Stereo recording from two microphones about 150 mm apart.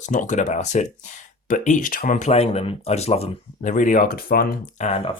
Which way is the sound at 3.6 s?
55° left (ahead or behind).